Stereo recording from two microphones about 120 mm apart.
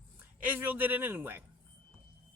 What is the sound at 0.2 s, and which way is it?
A man's voice, 15° right (ahead or behind).